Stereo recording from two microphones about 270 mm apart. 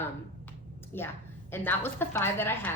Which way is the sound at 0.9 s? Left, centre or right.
Centre.